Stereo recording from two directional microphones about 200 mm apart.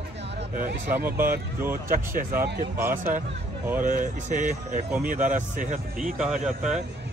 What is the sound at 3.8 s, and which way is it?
Speech, 40° right (ahead or behind).